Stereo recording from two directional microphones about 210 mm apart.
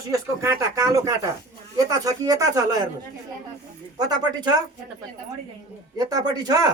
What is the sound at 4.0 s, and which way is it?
Speech, 20° right (ahead or behind).